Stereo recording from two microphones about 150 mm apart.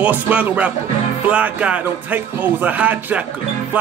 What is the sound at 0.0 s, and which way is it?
Speech, 10° right (ahead or behind).